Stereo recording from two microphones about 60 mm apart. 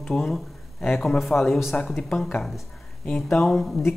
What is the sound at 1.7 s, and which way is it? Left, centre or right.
Speech, left.